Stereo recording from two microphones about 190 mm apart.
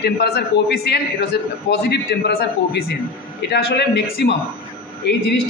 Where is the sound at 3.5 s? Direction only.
60° left (ahead or behind).